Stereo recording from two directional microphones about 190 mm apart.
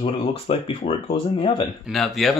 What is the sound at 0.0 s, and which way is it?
Speech, 30° left (ahead or behind).